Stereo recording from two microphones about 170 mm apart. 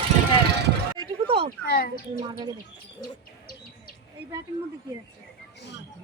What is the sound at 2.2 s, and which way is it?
Speech, 25° right (ahead or behind).